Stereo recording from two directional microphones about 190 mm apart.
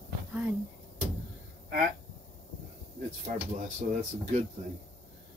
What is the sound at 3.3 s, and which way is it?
Speech, 40° right (ahead or behind).